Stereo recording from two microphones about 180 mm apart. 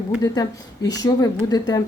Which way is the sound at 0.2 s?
20° left (ahead or behind).